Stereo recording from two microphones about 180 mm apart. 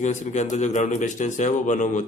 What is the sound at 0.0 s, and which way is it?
A man's voice, 40° left (ahead or behind).